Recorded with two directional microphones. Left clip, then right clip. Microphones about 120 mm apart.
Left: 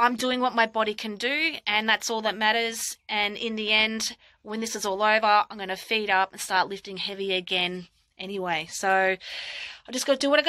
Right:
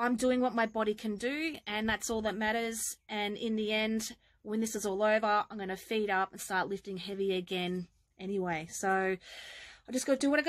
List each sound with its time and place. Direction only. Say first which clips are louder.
0.0 s speech: left 7 dB; 30° right (ahead or behind)